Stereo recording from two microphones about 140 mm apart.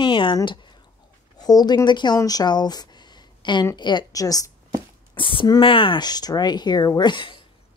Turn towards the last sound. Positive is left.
turn(degrees=35)  # may be behind; listen again after turning